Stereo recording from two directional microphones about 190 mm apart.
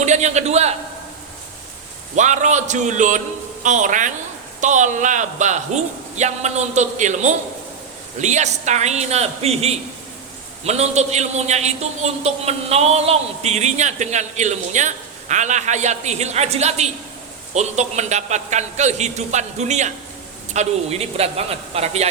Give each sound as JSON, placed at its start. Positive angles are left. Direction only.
{"t": 0.0, "sound": "a man's voice", "side_deg": -35}
{"t": 2.1, "sound": "a man's voice", "side_deg": -40}